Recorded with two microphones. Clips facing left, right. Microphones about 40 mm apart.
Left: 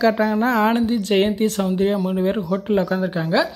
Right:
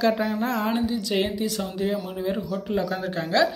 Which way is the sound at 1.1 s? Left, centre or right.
Left.